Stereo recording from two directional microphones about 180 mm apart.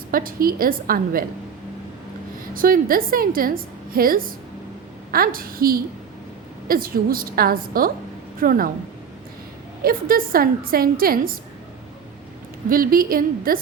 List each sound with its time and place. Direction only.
0.1 s a woman's voice: 50° right (ahead or behind)
2.6 s a woman's voice: 50° right (ahead or behind)
9.8 s a woman's voice: 55° right (ahead or behind)
12.6 s a woman's voice: 50° right (ahead or behind)